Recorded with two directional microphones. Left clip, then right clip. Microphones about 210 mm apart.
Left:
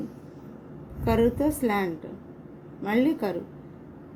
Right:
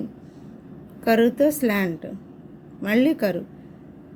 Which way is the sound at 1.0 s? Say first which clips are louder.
Right 5 dB; 55° right (ahead or behind).